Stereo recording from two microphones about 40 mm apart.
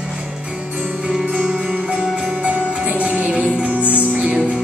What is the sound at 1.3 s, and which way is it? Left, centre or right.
Music, right.